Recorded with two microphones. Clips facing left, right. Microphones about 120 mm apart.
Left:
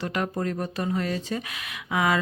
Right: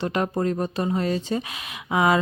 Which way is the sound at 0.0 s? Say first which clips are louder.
Right 4 dB; 30° right (ahead or behind).